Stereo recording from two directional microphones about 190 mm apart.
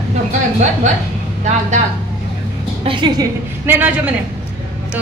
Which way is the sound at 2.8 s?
20° right (ahead or behind).